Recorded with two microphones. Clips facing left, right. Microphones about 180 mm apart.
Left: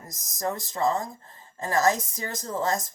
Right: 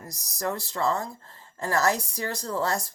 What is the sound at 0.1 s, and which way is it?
A woman's voice, 20° left (ahead or behind).